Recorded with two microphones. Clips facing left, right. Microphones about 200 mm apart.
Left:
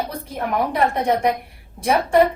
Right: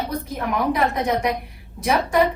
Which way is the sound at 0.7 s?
30° left (ahead or behind).